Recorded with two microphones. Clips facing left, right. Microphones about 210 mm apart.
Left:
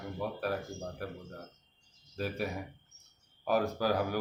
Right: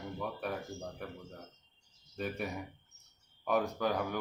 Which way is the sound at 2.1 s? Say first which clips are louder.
Left 2 dB; centre (ahead or behind).